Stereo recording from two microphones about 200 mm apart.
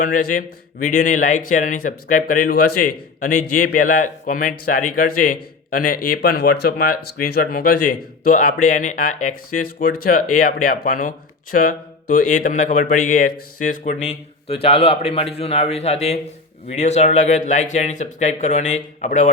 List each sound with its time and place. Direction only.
0.0 s a man's voice: 40° left (ahead or behind)